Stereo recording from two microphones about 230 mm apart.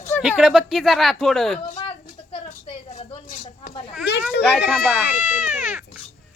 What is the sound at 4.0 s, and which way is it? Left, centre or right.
Speech, left.